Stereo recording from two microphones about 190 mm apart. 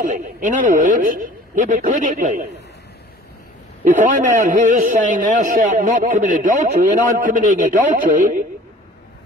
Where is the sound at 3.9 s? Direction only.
40° right (ahead or behind).